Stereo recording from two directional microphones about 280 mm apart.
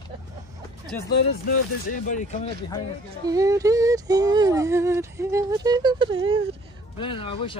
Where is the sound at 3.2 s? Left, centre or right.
Centre.